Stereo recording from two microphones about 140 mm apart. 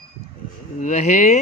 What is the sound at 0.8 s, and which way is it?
Speech, 65° left (ahead or behind).